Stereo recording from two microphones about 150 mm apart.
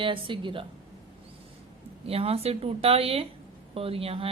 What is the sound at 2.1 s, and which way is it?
Speech, 40° right (ahead or behind).